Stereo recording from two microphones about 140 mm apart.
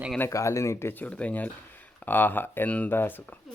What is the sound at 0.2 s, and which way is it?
A woman's voice, 20° left (ahead or behind).